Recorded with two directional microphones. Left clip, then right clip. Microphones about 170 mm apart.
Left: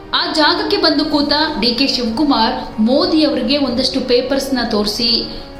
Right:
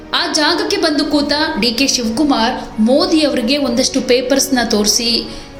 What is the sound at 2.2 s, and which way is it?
A woman's voice, 10° right (ahead or behind).